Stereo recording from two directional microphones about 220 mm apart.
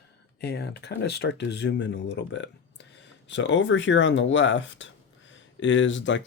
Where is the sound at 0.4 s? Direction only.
50° left (ahead or behind).